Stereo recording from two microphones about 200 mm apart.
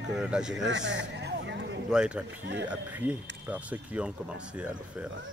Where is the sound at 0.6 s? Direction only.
65° right (ahead or behind).